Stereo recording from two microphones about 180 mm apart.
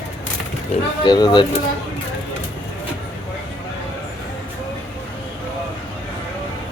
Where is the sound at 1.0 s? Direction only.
25° left (ahead or behind).